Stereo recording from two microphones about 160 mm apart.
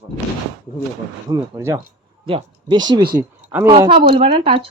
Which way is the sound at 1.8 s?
35° right (ahead or behind).